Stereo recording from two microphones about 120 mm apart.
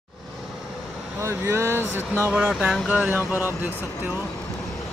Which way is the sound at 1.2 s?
20° right (ahead or behind).